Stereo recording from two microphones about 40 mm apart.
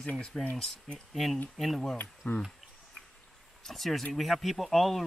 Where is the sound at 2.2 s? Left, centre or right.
Left.